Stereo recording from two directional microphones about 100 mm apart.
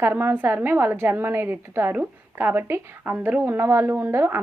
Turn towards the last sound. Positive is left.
turn(degrees=-25)  # may be behind; listen again after turning